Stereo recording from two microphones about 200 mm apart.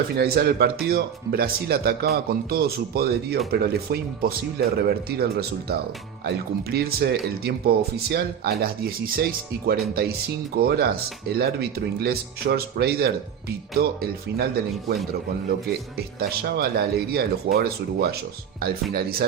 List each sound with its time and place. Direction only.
0.2 s speech: 50° right (ahead or behind)
16.0 s speech: 50° right (ahead or behind)